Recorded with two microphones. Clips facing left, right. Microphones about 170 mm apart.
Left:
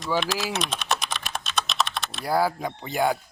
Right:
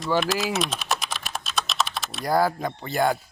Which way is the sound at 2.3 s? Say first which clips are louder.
Right 1 dB; 10° left (ahead or behind).